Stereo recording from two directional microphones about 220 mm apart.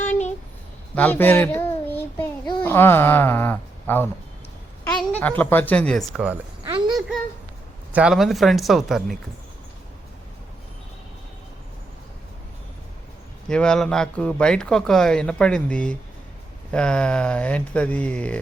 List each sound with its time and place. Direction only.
0.9 s speech: 10° left (ahead or behind)
1.9 s child singing: 10° left (ahead or behind)
2.6 s speech: 10° left (ahead or behind)
4.8 s a sound: 10° left (ahead or behind)
5.4 s speech: 10° left (ahead or behind)
6.7 s a sound: 20° right (ahead or behind)
7.9 s speech: 5° right (ahead or behind)
13.5 s speech: 5° left (ahead or behind)